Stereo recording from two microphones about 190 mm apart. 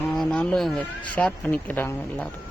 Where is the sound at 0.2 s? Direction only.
Centre (ahead or behind).